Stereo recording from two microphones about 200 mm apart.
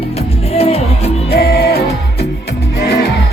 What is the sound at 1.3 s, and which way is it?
Music, 50° left (ahead or behind).